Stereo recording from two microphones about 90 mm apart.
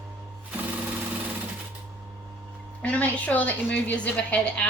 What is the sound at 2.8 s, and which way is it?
A woman's voice, 15° left (ahead or behind).